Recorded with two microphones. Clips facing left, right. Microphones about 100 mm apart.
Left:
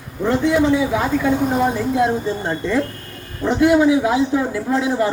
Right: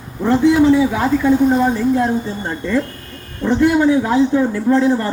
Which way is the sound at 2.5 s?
5° left (ahead or behind).